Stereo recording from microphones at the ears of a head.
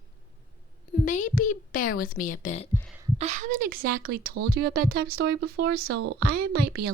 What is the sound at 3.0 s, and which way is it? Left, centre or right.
A woman's voice, right.